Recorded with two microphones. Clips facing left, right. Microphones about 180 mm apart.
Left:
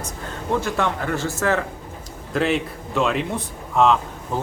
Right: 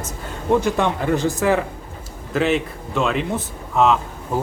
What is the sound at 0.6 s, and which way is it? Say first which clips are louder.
Speech: right 3 dB; 15° right (ahead or behind).